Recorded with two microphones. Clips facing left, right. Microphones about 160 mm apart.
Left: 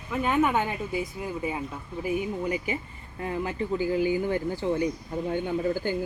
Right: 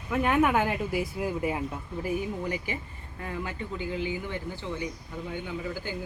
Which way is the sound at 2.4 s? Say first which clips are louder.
Left 3 dB; 25° left (ahead or behind).